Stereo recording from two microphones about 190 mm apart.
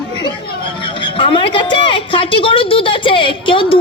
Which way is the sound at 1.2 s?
25° left (ahead or behind).